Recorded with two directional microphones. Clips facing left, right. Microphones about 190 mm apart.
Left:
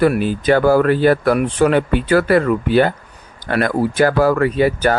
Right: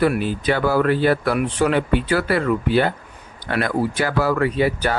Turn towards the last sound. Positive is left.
turn(degrees=45)  # may be behind; listen again after turning